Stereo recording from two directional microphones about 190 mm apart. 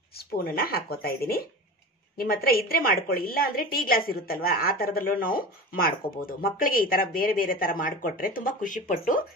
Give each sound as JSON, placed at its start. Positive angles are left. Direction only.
{"t": 0.3, "sound": "a woman's voice", "side_deg": 55}